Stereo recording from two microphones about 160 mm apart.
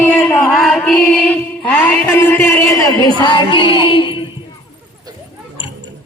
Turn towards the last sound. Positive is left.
turn(degrees=30)  # may be behind; listen again after turning